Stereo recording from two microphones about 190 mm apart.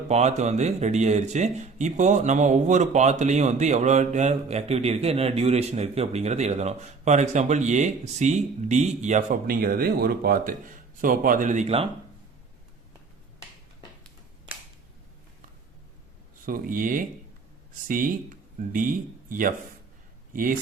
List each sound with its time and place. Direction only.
0.1 s speech: 35° right (ahead or behind)
16.5 s speech: 45° right (ahead or behind)